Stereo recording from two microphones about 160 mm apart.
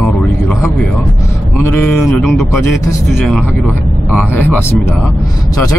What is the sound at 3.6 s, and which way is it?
Speech, 5° right (ahead or behind).